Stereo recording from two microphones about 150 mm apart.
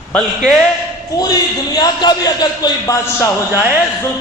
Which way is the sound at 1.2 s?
25° left (ahead or behind).